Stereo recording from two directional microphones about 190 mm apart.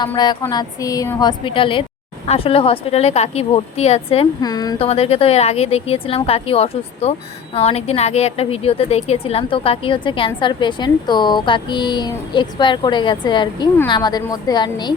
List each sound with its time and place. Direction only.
0.0 s a woman's voice: 20° left (ahead or behind)
4.4 s a woman's voice: 20° left (ahead or behind)
4.9 s a woman's voice: 30° left (ahead or behind)